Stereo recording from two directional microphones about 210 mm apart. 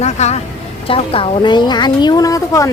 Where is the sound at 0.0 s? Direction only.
30° left (ahead or behind); by 2.6 s 15° left (ahead or behind).